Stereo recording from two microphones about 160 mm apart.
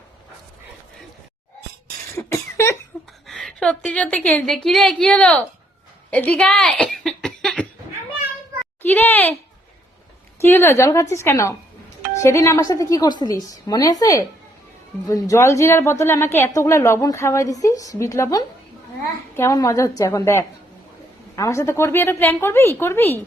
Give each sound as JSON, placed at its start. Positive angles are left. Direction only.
{"t": 2.1, "sound": "cough", "side_deg": 15}
{"t": 3.2, "sound": "a woman's voice", "side_deg": 5}
{"t": 6.1, "sound": "a sound", "side_deg": 10}
{"t": 8.8, "sound": "a child's voice", "side_deg": 10}
{"t": 10.4, "sound": "a woman's voice", "side_deg": 15}